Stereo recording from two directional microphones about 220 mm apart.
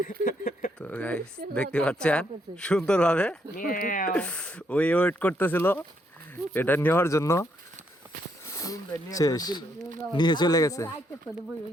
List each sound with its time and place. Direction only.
0.0 s speech: 40° left (ahead or behind)
0.8 s speech: 5° left (ahead or behind)
3.6 s speech: 40° left (ahead or behind)
4.1 s speech: 5° left (ahead or behind)
8.4 s speech: 15° left (ahead or behind)